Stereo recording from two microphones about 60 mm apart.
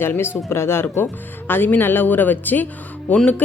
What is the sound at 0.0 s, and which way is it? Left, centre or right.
Speech, left.